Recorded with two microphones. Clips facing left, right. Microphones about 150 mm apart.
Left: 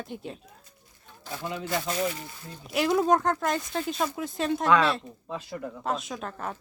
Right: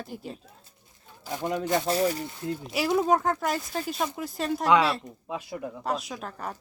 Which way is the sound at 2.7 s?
Centre (ahead or behind).